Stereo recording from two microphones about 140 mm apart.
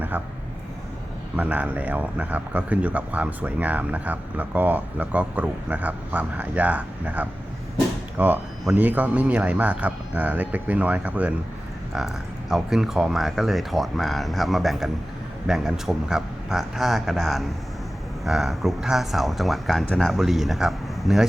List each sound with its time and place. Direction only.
1.4 s speech: 10° right (ahead or behind)